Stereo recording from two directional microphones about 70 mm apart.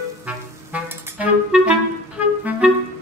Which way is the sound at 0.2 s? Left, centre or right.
Right.